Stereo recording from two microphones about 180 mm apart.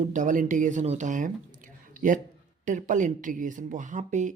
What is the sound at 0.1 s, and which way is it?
A woman's voice, 45° right (ahead or behind).